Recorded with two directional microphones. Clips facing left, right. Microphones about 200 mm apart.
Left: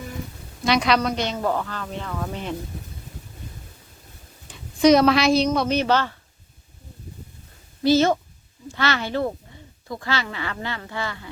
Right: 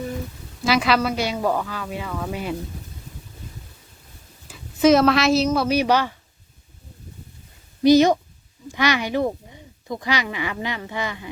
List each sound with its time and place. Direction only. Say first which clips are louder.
0.6 s a woman's voice: right 1 dB; 5° right (ahead or behind)
4.4 s a woman's voice: even; centre (ahead or behind)
7.8 s speech: right 4 dB; 15° right (ahead or behind)